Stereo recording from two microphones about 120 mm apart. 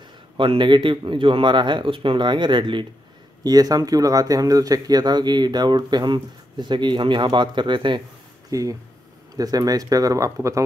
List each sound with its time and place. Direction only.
0.4 s speech: 45° right (ahead or behind)
8.5 s speech: 30° right (ahead or behind)